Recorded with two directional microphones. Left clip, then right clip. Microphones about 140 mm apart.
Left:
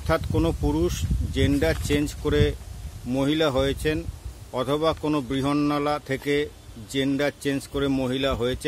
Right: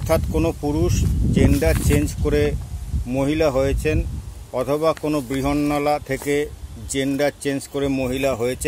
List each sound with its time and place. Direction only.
0.3 s speech: 15° left (ahead or behind)